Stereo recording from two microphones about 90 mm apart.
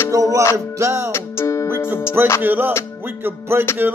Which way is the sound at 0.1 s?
40° right (ahead or behind).